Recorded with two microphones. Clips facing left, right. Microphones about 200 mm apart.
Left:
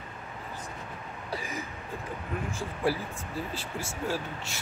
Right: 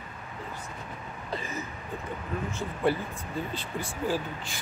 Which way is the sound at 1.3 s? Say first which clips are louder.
Right 1 dB; 10° left (ahead or behind).